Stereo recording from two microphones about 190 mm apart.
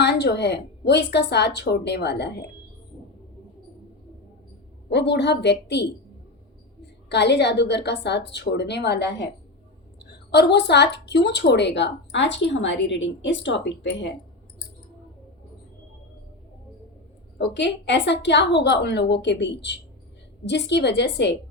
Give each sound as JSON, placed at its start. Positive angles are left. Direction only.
{"t": 0.0, "sound": "a woman's voice", "side_deg": 60}
{"t": 4.9, "sound": "a woman's voice", "side_deg": 65}
{"t": 7.1, "sound": "a woman's voice", "side_deg": 65}
{"t": 17.3, "sound": "a woman's voice", "side_deg": 65}